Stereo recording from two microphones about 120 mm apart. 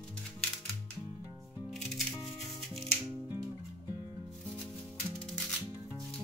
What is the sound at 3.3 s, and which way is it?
Music, 30° left (ahead or behind).